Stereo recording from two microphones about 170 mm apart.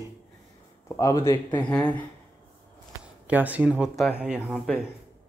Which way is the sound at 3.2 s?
10° right (ahead or behind).